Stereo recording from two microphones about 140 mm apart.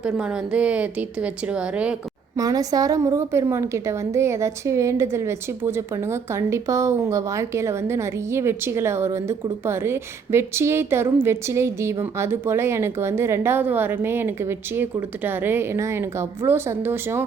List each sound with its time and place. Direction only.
0.0 s a woman's voice: 5° right (ahead or behind)
2.3 s a woman's voice: 25° right (ahead or behind)